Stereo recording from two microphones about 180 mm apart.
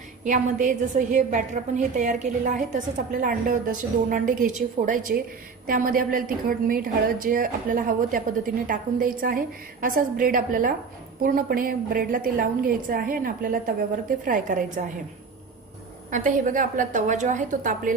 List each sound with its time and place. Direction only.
0.2 s a woman's voice: 45° right (ahead or behind)
16.1 s a woman's voice: 45° right (ahead or behind)